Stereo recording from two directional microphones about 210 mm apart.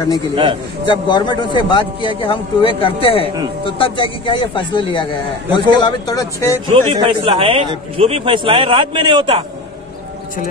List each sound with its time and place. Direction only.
0.8 s speech: 20° left (ahead or behind)
6.7 s a man's voice: 25° right (ahead or behind)